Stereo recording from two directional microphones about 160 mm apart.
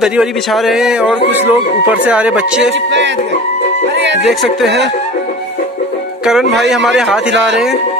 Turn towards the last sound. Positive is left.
turn(degrees=-5)  # may be behind; listen again after turning